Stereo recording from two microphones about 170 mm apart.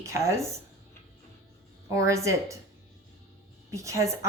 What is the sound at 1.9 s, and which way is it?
Speech, 15° right (ahead or behind).